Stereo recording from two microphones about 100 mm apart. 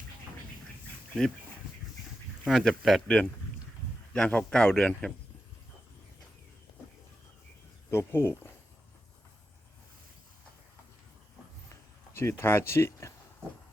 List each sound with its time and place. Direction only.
2.4 s speech: centre (ahead or behind)
7.9 s speech: 25° left (ahead or behind)
12.1 s speech: 25° left (ahead or behind)